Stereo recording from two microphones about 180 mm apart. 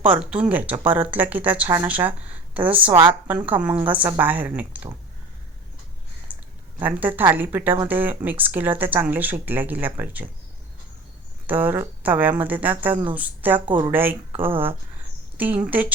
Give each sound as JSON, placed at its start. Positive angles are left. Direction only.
{"t": 0.0, "sound": "speech", "side_deg": -5}
{"t": 6.3, "sound": "a sound", "side_deg": -10}
{"t": 6.7, "sound": "speech", "side_deg": -10}
{"t": 11.4, "sound": "speech", "side_deg": -10}
{"t": 13.7, "sound": "speech", "side_deg": -25}
{"t": 13.9, "sound": "speech", "side_deg": -10}
{"t": 15.4, "sound": "speech", "side_deg": -10}